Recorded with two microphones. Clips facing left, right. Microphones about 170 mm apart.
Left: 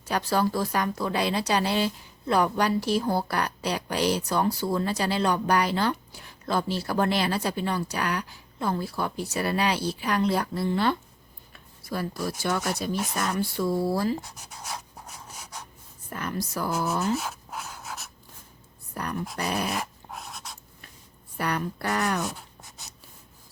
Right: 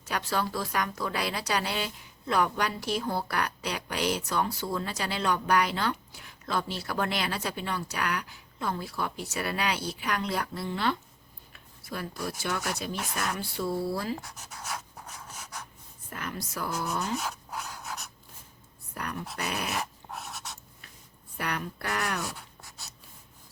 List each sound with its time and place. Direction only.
0.0 s speech: 35° left (ahead or behind)
14.3 s pant: 15° left (ahead or behind)
16.0 s speech: 40° left (ahead or behind)
17.2 s pant: 5° left (ahead or behind)
19.0 s speech: 40° left (ahead or behind)
20.1 s pant: centre (ahead or behind)
21.3 s speech: 35° left (ahead or behind)
22.2 s a sound: 20° left (ahead or behind)